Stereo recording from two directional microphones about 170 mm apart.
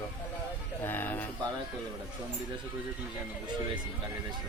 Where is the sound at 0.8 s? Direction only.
10° left (ahead or behind).